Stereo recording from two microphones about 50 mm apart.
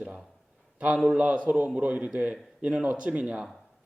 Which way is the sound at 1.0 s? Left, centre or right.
Right.